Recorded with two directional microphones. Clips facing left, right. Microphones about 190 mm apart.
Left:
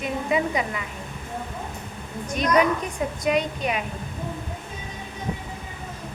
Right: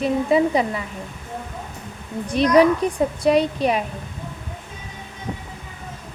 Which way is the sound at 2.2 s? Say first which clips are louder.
Right 6 dB; 30° right (ahead or behind).